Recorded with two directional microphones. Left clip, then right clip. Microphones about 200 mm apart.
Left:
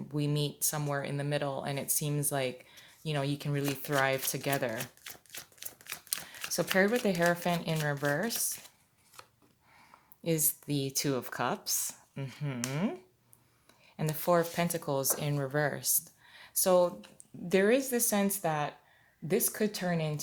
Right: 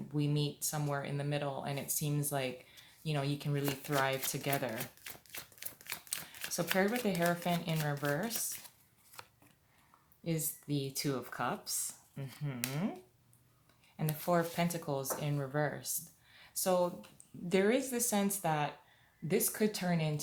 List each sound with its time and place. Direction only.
0.1 s speech: 40° left (ahead or behind)
5.0 s a sound: 10° left (ahead or behind)
6.7 s speech: 40° left (ahead or behind)
9.2 s chopping: 10° right (ahead or behind)
10.2 s speech: 45° left (ahead or behind)
14.3 s speech: 40° left (ahead or behind)
16.3 s a sound: 45° left (ahead or behind)
17.5 s speech: 35° left (ahead or behind)